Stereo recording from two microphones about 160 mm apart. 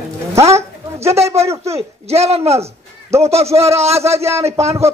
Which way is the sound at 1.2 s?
40° right (ahead or behind).